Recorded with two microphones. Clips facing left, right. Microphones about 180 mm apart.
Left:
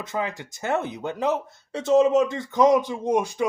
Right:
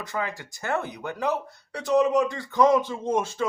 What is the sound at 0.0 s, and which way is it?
Speech, 20° left (ahead or behind).